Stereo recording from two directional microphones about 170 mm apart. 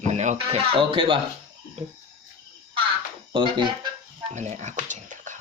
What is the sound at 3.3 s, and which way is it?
Speech, 30° right (ahead or behind).